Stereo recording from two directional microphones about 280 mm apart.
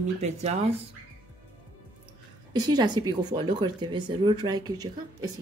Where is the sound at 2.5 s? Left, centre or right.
Centre.